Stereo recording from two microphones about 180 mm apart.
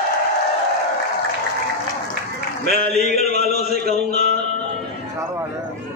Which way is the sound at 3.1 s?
60° right (ahead or behind).